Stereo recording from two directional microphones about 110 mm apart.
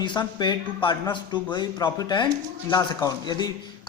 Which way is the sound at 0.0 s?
45° left (ahead or behind).